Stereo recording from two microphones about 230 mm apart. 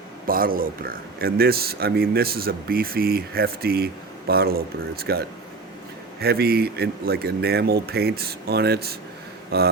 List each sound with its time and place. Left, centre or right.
0.3 s speech: right